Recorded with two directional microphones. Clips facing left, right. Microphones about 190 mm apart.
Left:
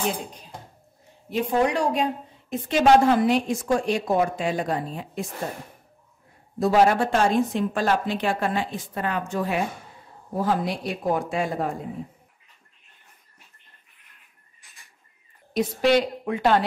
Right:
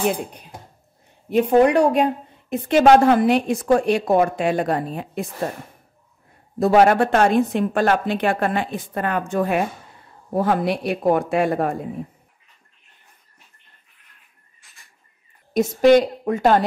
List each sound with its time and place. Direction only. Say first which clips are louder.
0.1 s a woman's voice: right 5 dB; 60° right (ahead or behind)
6.6 s a woman's voice: right 4 dB; 60° right (ahead or behind)
15.5 s a woman's voice: right 6 dB; 45° right (ahead or behind)